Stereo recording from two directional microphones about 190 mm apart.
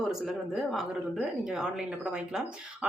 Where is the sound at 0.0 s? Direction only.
Centre (ahead or behind).